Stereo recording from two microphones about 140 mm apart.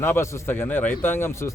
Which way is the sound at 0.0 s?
20° left (ahead or behind).